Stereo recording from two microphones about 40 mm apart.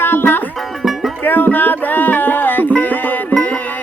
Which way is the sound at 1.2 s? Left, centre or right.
Left.